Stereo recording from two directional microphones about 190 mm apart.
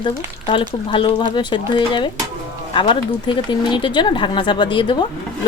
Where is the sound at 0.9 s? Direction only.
25° left (ahead or behind).